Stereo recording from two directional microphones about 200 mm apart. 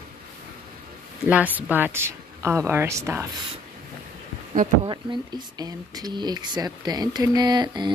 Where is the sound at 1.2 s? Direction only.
10° right (ahead or behind).